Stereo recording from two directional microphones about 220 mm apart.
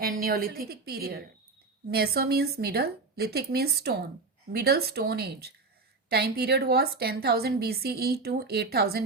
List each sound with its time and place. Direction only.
0.0 s a woman's voice: 40° right (ahead or behind)